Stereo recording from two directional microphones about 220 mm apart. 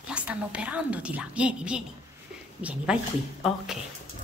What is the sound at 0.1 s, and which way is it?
A woman's voice, 5° right (ahead or behind).